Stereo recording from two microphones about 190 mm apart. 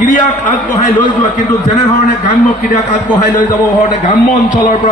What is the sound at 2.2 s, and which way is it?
A man's voice, 45° left (ahead or behind).